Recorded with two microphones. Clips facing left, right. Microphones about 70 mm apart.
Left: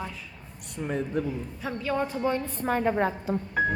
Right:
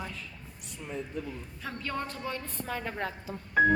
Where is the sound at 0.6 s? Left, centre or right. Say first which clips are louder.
Left 8 dB; left.